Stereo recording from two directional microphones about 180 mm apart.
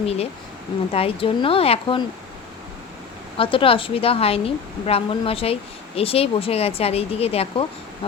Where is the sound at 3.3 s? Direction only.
30° left (ahead or behind).